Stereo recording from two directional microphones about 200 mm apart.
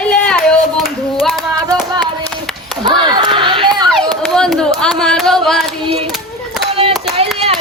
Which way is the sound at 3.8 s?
Centre (ahead or behind).